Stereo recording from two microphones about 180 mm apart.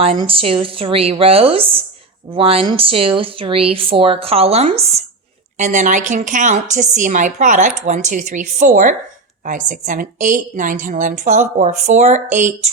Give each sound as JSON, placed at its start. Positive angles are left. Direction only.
{"t": 0.0, "sound": "a woman's voice", "side_deg": -30}